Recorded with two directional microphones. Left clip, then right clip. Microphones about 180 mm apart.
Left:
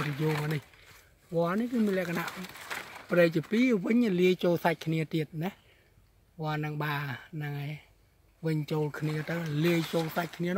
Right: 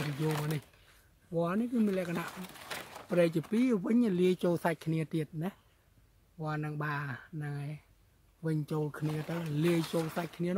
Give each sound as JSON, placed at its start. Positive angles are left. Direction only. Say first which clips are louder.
{"t": 1.3, "sound": "speech", "louder": "left 3 dB", "side_deg": 0}